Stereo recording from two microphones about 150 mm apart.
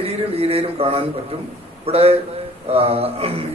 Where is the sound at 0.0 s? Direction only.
40° right (ahead or behind).